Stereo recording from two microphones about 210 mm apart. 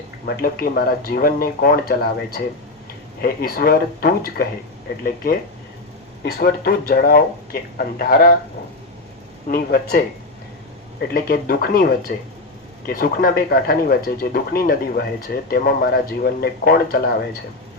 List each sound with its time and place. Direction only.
0.3 s speech: 45° left (ahead or behind)
9.5 s speech: 45° left (ahead or behind)
11.1 s speech: 45° left (ahead or behind)